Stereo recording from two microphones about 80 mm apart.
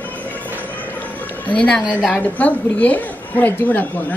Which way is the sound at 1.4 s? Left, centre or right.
Centre.